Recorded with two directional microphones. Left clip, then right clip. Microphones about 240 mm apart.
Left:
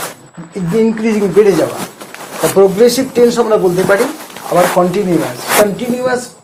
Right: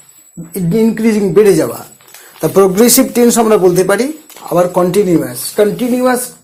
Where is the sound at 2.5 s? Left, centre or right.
Right.